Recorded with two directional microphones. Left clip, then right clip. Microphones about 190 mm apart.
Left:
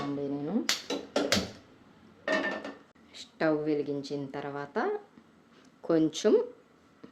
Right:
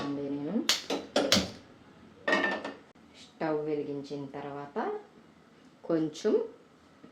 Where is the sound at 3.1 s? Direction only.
50° left (ahead or behind).